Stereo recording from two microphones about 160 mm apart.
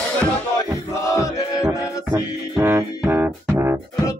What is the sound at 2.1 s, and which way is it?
Music, 15° right (ahead or behind).